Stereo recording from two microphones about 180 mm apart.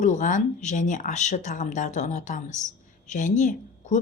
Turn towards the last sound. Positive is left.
turn(degrees=45)  # may be behind; listen again after turning